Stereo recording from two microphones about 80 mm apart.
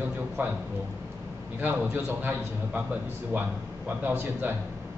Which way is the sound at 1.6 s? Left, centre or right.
Right.